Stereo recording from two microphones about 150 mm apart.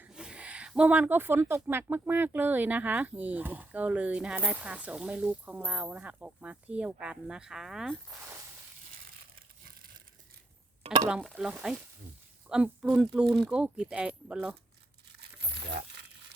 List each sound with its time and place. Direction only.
0.0 s speech: 5° right (ahead or behind)
8.9 s crushing: 70° right (ahead or behind)
10.8 s speech: 45° right (ahead or behind)
11.3 s speech: 5° right (ahead or behind)